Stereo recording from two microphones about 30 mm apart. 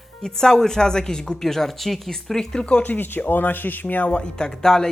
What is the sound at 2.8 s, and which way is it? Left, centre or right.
Speech, left.